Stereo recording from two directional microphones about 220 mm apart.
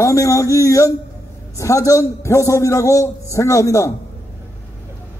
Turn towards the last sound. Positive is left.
turn(degrees=15)  # may be behind; listen again after turning